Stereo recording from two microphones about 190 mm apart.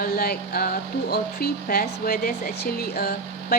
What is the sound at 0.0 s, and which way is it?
Speech, 50° left (ahead or behind).